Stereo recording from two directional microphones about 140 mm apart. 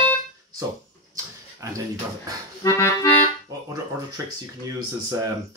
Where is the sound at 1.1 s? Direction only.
25° right (ahead or behind).